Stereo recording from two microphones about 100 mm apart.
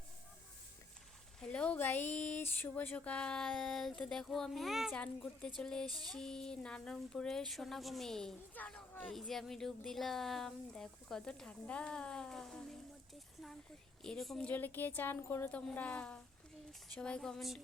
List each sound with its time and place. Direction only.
1.4 s speech: 10° left (ahead or behind)
4.9 s speech: 10° left (ahead or behind)
5.8 s a sound: 45° right (ahead or behind)
6.1 s speech: 5° left (ahead or behind)
9.1 s speech: centre (ahead or behind)
14.0 s speech: 5° left (ahead or behind)
14.4 s a woman's voice: 20° left (ahead or behind); by 17.6 s centre (ahead or behind)